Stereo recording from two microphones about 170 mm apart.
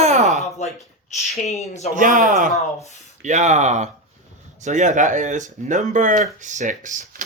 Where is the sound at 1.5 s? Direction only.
40° left (ahead or behind).